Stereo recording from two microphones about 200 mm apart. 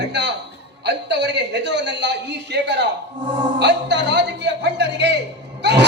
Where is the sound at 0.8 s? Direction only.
60° right (ahead or behind).